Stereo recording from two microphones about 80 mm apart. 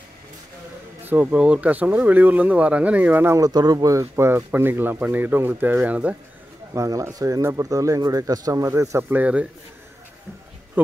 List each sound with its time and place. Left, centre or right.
1.0 s speech: right
3.3 s speech: right; by 6.1 s centre
6.7 s speech: right
9.1 s speech: centre